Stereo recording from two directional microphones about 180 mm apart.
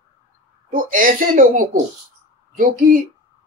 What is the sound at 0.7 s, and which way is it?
Speech, 45° right (ahead or behind).